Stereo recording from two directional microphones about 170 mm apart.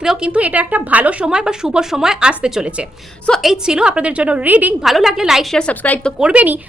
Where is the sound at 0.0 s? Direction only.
5° right (ahead or behind).